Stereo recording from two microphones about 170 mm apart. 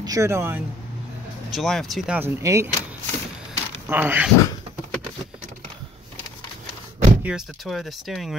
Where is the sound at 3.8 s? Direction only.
10° right (ahead or behind).